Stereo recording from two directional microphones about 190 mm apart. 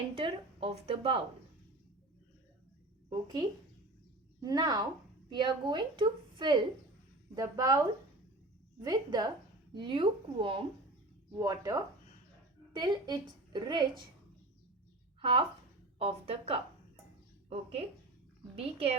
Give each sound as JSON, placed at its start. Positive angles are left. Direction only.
{"t": 0.2, "sound": "a woman's voice", "side_deg": -30}
{"t": 4.4, "sound": "a woman's voice", "side_deg": -20}
{"t": 15.2, "sound": "a woman's voice", "side_deg": -30}